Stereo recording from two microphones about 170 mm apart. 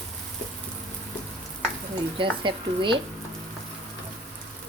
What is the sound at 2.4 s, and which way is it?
Speech, 30° right (ahead or behind).